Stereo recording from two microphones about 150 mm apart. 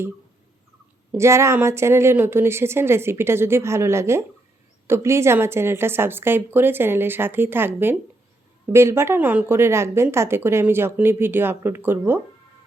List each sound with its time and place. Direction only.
1.1 s speech: 20° right (ahead or behind)